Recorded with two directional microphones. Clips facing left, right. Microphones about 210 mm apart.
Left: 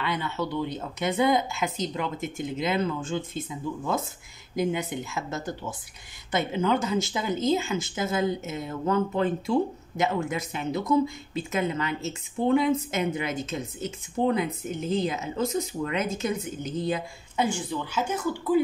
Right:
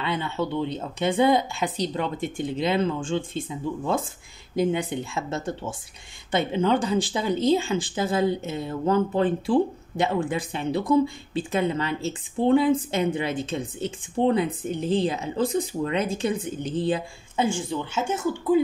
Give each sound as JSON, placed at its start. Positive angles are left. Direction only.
{"t": 0.0, "sound": "speech", "side_deg": -25}